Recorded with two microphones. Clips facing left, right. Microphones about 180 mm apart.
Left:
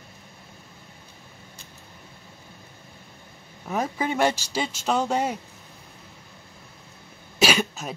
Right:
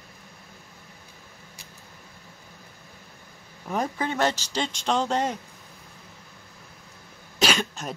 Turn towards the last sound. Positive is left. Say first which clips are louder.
# left 2 dB
turn(degrees=5)  # may be behind; listen again after turning